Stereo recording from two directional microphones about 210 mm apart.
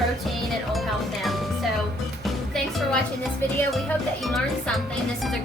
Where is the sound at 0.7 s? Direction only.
Centre (ahead or behind).